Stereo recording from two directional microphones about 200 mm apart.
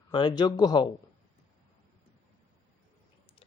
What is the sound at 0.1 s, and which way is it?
Speech, 20° left (ahead or behind).